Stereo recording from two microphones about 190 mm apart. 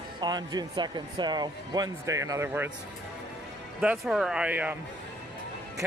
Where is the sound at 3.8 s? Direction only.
5° right (ahead or behind).